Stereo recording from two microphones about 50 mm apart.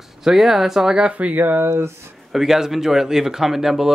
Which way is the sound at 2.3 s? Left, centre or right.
Centre.